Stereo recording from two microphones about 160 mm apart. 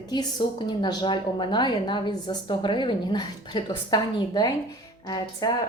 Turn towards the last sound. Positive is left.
turn(degrees=25)  # may be behind; listen again after turning